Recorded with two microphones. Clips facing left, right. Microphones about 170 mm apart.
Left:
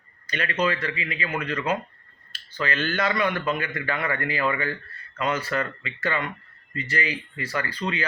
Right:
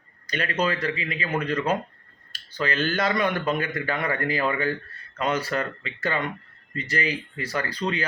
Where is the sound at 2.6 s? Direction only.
40° right (ahead or behind).